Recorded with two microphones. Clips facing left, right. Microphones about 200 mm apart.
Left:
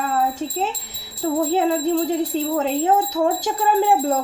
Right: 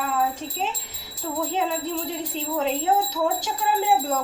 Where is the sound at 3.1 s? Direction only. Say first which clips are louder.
Left 5 dB; 50° left (ahead or behind).